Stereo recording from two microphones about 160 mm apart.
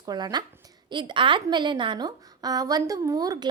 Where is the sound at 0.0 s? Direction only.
25° right (ahead or behind).